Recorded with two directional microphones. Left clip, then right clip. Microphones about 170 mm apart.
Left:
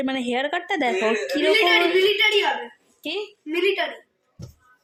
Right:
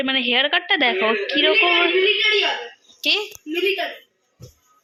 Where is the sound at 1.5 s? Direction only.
10° left (ahead or behind).